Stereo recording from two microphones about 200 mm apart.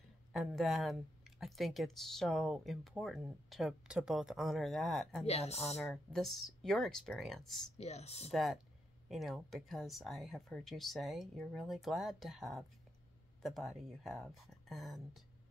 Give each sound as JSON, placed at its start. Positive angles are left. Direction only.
{"t": 0.3, "sound": "speech", "side_deg": 0}
{"t": 5.2, "sound": "speech", "side_deg": 30}
{"t": 5.8, "sound": "speech", "side_deg": 0}
{"t": 7.7, "sound": "speech", "side_deg": 30}
{"t": 8.3, "sound": "speech", "side_deg": 0}